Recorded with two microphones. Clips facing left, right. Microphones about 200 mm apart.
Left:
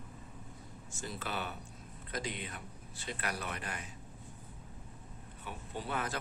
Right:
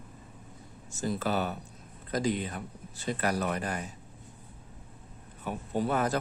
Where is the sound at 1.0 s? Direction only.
40° right (ahead or behind).